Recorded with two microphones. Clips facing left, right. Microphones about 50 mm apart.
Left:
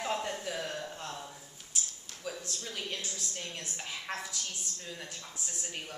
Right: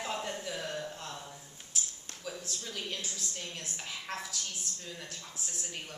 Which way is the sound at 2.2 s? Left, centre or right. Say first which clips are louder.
Left 1 dB; centre.